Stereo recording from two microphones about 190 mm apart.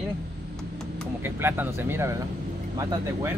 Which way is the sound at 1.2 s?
10° right (ahead or behind).